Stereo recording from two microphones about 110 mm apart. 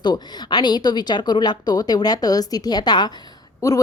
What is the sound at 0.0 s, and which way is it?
A woman's voice, 40° left (ahead or behind).